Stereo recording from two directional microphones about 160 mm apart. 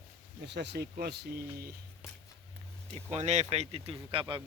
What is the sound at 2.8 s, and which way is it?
Speech, 40° right (ahead or behind).